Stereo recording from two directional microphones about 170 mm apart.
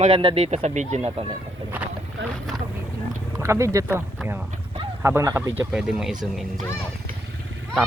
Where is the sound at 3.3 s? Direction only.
15° right (ahead or behind).